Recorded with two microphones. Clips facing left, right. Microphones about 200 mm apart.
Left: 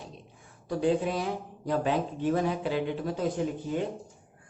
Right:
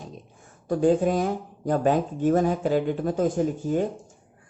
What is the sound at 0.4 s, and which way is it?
Speech, 45° right (ahead or behind).